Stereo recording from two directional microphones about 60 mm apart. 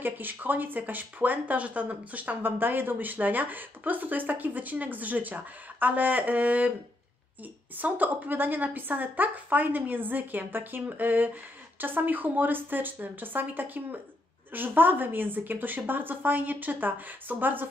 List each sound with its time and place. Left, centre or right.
0.0 s speech: right
7.7 s a woman's voice: right